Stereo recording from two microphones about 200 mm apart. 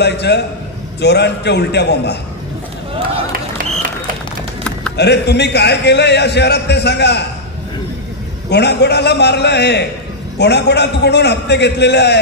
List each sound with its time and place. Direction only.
0.0 s a man's voice: 55° left (ahead or behind)
4.9 s a man's voice: 55° left (ahead or behind)
8.5 s a man's voice: 55° left (ahead or behind)